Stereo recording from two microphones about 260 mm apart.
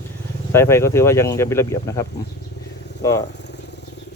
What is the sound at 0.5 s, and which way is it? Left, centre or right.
Speech, centre.